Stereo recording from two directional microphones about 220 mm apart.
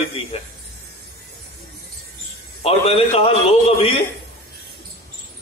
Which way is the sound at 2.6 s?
25° left (ahead or behind).